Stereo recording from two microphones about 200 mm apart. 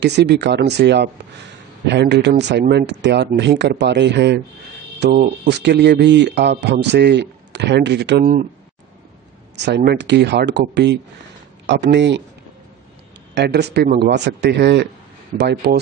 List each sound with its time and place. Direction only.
0.0 s speech: 60° right (ahead or behind)
9.7 s speech: 55° right (ahead or behind)
13.3 s speech: 55° right (ahead or behind)